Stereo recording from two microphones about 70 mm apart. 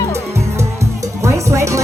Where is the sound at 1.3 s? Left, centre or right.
Right.